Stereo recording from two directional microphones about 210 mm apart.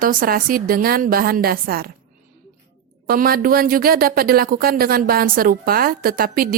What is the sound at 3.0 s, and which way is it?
Speech, 45° right (ahead or behind).